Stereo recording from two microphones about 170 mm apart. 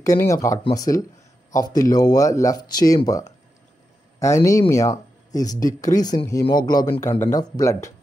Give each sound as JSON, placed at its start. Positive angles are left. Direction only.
{"t": 0.0, "sound": "speech", "side_deg": 20}
{"t": 4.2, "sound": "speech", "side_deg": 15}